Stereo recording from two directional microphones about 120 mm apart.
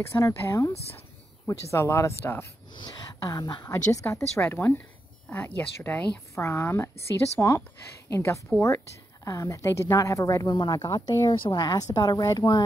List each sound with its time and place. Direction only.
0.1 s a woman's voice: 25° left (ahead or behind)
2.8 s speech: 30° left (ahead or behind)
3.6 s a woman's voice: 20° left (ahead or behind); by 12.6 s 35° left (ahead or behind)